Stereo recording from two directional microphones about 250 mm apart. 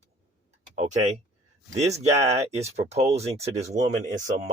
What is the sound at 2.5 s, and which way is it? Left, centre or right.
Speech, right.